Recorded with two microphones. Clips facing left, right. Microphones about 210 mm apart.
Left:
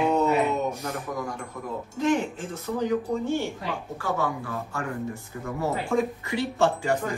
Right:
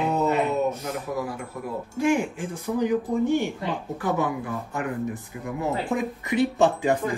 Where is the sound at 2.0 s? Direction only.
10° right (ahead or behind).